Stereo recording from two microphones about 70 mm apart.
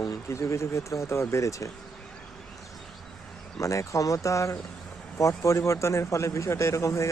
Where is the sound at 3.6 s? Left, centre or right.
Left.